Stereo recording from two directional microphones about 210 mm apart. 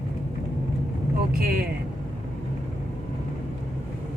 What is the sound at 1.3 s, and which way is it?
Speech, 45° right (ahead or behind).